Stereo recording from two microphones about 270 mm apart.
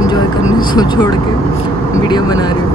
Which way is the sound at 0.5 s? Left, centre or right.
Centre.